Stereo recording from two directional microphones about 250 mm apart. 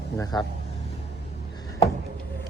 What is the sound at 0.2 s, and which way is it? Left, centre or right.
Speech, centre.